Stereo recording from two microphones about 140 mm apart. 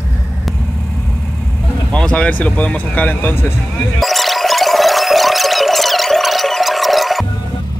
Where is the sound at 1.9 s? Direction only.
5° left (ahead or behind).